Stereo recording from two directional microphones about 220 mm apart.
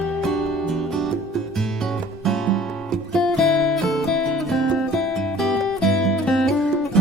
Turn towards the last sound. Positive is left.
turn(degrees=0)  # may be behind; listen again after turning